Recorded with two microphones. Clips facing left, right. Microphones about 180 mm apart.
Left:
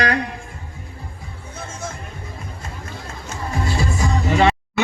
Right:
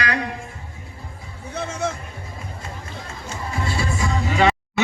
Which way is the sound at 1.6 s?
65° right (ahead or behind).